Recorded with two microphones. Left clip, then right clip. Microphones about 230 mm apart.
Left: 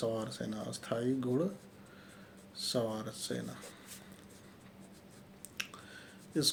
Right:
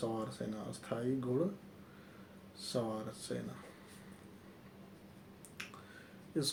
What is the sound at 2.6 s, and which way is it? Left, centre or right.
Speech, left.